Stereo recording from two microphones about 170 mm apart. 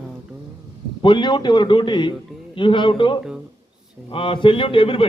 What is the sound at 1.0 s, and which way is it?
A man's voice, 25° left (ahead or behind).